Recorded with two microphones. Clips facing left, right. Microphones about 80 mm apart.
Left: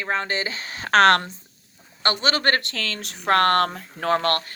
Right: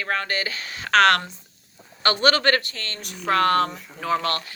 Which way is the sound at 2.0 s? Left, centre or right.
Left.